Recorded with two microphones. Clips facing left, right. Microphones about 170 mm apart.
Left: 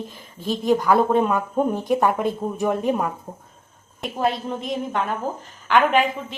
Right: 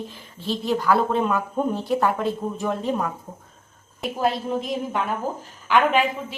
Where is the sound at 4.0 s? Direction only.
Centre (ahead or behind).